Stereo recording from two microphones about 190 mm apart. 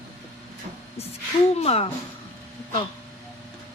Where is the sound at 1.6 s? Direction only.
30° left (ahead or behind).